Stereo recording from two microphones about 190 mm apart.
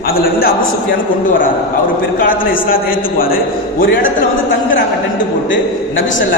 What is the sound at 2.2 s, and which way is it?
A man's voice, 50° left (ahead or behind).